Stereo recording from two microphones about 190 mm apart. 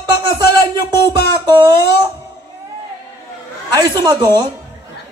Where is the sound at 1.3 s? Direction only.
20° right (ahead or behind).